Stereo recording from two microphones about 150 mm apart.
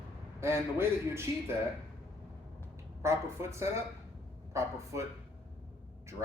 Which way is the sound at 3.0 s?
20° right (ahead or behind).